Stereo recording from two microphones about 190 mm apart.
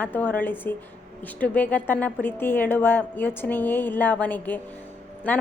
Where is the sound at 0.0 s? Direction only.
10° left (ahead or behind).